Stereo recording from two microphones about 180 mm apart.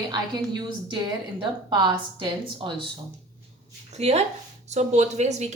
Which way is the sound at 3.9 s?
35° right (ahead or behind).